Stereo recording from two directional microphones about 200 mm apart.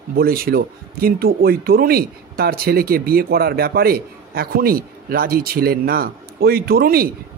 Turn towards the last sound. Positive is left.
turn(degrees=-50)  # may be behind; listen again after turning